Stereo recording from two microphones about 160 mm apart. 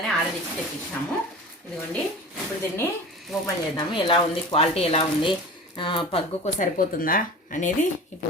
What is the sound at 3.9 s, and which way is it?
Speech, 30° left (ahead or behind).